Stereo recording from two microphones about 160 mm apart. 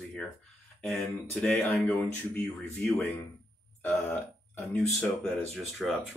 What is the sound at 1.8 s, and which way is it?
Speech, 10° left (ahead or behind).